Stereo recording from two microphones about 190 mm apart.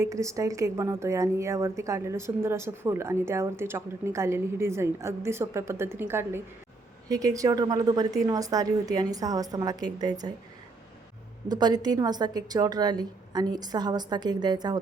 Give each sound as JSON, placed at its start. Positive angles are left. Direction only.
{"t": 0.0, "sound": "a woman's voice", "side_deg": -15}
{"t": 11.4, "sound": "a woman's voice", "side_deg": -20}